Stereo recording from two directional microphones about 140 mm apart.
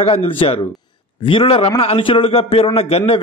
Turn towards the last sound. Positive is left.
turn(degrees=45)  # may be behind; listen again after turning